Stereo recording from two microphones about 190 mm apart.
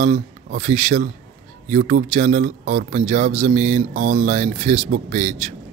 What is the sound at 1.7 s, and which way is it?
A man's voice, 45° right (ahead or behind).